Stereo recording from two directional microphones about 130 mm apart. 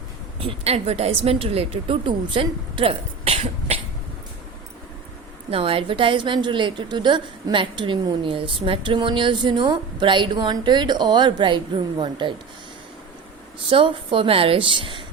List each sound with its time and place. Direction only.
0.3 s a woman's voice: 50° right (ahead or behind)
5.5 s a woman's voice: 45° right (ahead or behind)
13.7 s a woman's voice: 45° right (ahead or behind)